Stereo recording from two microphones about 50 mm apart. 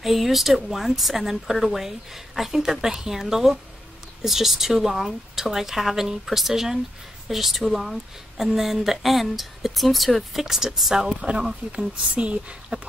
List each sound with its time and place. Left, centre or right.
0.0 s speech: centre; by 12.7 s right